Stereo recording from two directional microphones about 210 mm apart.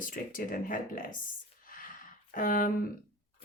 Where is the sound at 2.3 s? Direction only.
40° left (ahead or behind).